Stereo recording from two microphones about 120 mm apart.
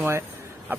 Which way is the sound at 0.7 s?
20° right (ahead or behind).